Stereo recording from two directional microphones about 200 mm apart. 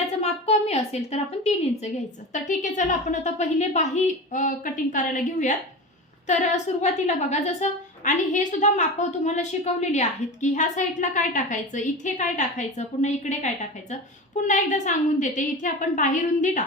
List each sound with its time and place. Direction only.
0.2 s a sound: 30° left (ahead or behind)
2.3 s a woman's voice: 40° left (ahead or behind)
6.8 s a woman's voice: 35° left (ahead or behind)